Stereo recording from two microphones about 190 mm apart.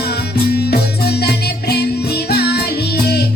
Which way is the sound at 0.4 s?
55° left (ahead or behind).